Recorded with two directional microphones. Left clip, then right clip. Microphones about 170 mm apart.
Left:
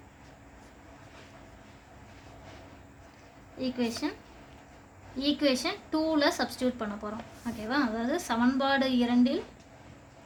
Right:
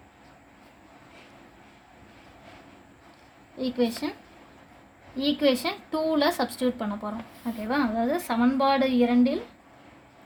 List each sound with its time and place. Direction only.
3.6 s a woman's voice: 70° right (ahead or behind)
5.1 s a woman's voice: 65° right (ahead or behind)